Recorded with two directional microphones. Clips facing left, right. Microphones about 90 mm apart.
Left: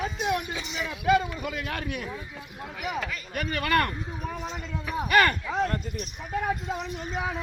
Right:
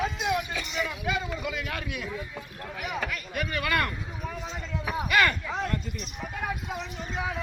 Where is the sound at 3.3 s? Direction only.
45° left (ahead or behind).